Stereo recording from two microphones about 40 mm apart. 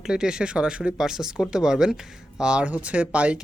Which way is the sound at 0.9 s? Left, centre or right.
Centre.